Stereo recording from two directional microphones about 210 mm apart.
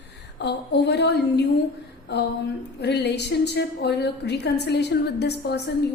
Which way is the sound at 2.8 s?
55° left (ahead or behind).